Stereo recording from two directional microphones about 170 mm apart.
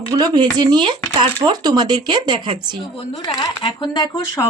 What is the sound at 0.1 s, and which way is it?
Speech, 25° right (ahead or behind).